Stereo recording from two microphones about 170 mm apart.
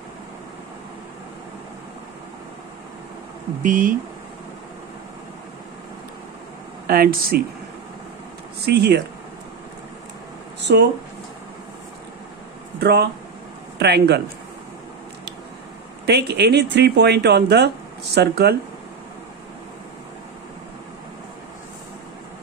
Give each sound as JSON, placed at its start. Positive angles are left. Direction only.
{"t": 3.6, "sound": "speech", "side_deg": -50}
{"t": 6.9, "sound": "speech", "side_deg": -60}
{"t": 8.6, "sound": "speech", "side_deg": -75}
{"t": 10.6, "sound": "a sound", "side_deg": -80}
{"t": 12.8, "sound": "speech", "side_deg": -70}
{"t": 16.1, "sound": "speech", "side_deg": -80}